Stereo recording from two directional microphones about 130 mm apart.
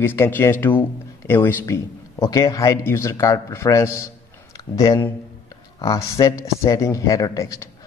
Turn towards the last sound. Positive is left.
turn(degrees=25)  # may be behind; listen again after turning